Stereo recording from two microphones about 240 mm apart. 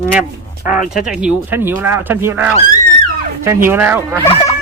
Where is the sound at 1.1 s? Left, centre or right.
Centre.